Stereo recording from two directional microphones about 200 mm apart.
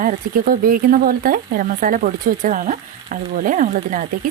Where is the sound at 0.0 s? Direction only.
45° right (ahead or behind).